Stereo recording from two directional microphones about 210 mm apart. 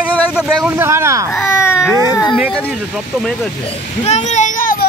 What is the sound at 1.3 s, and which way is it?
Speech, 10° left (ahead or behind).